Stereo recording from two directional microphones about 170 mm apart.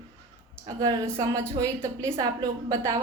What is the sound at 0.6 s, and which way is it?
A woman's voice, 20° right (ahead or behind).